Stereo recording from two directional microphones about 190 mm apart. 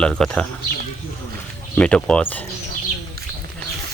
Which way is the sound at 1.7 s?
5° left (ahead or behind).